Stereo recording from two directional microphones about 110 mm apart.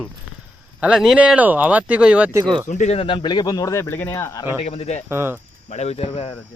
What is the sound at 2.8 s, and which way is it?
Speech, 60° left (ahead or behind).